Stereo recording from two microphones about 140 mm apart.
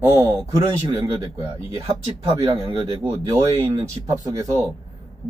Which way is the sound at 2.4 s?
35° right (ahead or behind).